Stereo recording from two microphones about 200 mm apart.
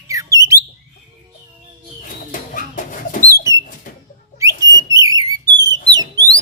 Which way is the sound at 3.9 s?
40° left (ahead or behind).